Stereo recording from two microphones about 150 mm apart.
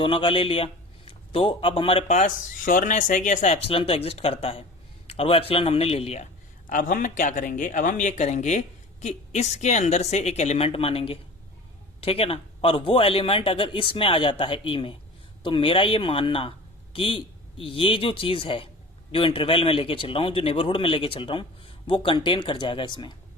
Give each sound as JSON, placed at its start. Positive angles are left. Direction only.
{"t": 0.0, "sound": "a man's voice", "side_deg": 35}
{"t": 6.7, "sound": "a man's voice", "side_deg": 60}